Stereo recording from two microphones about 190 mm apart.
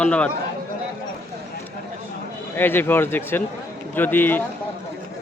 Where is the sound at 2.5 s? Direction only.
10° left (ahead or behind).